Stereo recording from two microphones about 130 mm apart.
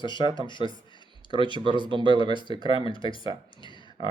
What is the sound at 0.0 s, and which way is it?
Speech, 35° left (ahead or behind).